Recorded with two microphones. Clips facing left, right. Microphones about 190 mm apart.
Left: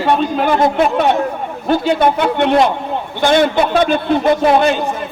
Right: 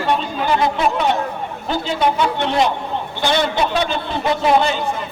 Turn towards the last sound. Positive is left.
turn(degrees=55)  # may be behind; listen again after turning